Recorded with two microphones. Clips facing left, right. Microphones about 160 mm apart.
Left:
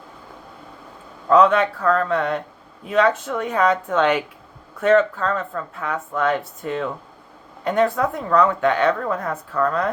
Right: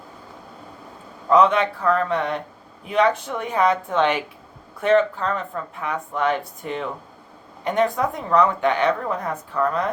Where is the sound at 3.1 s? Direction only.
30° right (ahead or behind).